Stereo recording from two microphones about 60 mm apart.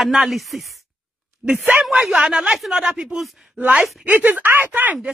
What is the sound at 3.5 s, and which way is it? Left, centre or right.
A man's voice, right.